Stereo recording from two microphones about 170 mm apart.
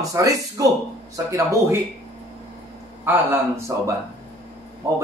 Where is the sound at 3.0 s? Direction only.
15° right (ahead or behind).